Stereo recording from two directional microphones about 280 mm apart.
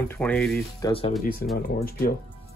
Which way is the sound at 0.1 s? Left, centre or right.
Centre.